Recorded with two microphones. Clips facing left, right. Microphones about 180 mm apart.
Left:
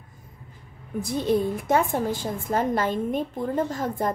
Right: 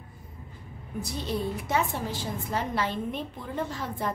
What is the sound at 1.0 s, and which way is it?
A woman's voice, 50° left (ahead or behind).